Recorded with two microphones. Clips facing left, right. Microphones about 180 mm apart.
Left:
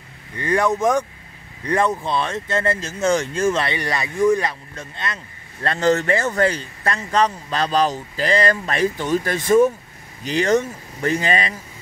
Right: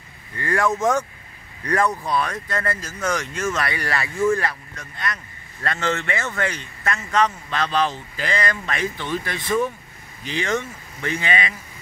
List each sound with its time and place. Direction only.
0.4 s speech: 20° left (ahead or behind); by 11.5 s 40° left (ahead or behind)